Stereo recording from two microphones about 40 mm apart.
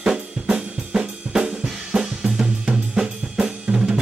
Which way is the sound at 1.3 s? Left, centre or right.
Centre.